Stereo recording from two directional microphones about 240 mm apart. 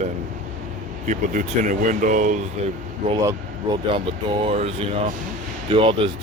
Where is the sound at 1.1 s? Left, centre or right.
Right.